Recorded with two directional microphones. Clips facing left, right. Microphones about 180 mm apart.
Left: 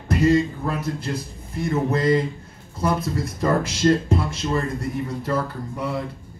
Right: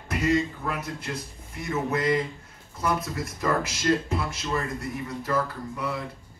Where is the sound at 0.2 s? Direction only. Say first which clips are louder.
Left 6 dB; 30° left (ahead or behind).